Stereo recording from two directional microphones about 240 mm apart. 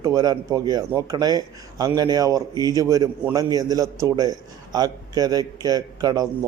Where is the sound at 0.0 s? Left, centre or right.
Centre.